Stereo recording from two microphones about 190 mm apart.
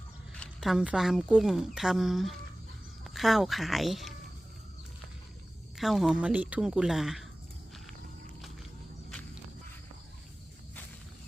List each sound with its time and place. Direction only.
0.3 s a woman's voice: centre (ahead or behind)
5.7 s speech: centre (ahead or behind)